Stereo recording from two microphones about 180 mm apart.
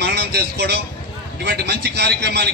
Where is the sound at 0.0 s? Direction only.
70° right (ahead or behind).